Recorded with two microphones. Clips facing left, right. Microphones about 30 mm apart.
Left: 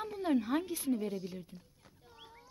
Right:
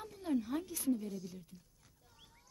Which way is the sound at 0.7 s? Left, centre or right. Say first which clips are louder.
Left 2 dB; left.